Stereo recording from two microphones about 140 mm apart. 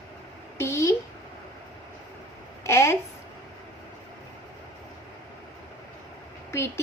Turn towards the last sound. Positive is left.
turn(degrees=20)  # may be behind; listen again after turning